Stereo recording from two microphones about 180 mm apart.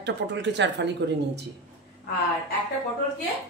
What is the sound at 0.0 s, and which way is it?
Speech, 75° right (ahead or behind).